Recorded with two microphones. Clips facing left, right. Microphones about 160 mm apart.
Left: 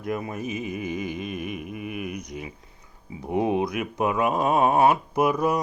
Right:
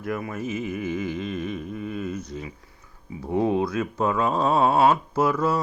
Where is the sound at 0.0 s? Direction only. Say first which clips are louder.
Even; 20° left (ahead or behind).